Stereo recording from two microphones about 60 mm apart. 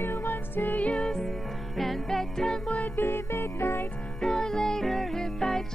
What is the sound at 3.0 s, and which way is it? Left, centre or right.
Music, left.